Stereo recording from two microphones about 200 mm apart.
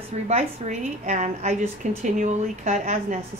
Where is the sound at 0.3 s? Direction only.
35° right (ahead or behind).